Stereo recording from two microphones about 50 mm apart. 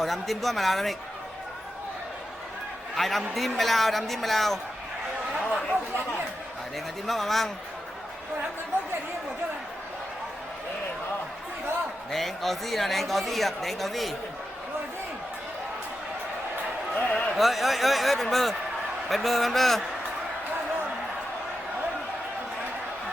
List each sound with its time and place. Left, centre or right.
0.0 s speech: centre
2.9 s speech: centre
7.1 s speech: centre
12.1 s speech: centre
16.9 s a man's voice: left
17.3 s speech: centre